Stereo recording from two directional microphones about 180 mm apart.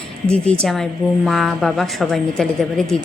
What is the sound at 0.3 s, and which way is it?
A woman's voice, 5° left (ahead or behind).